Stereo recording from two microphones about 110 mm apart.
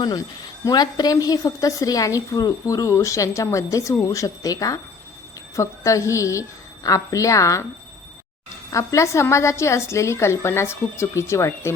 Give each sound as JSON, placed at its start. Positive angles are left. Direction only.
{"t": 0.6, "sound": "a woman's voice", "side_deg": 40}
{"t": 8.7, "sound": "a woman's voice", "side_deg": 30}